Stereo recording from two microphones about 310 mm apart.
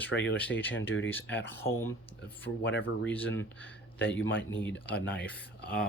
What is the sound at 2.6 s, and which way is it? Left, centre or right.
Speech, left.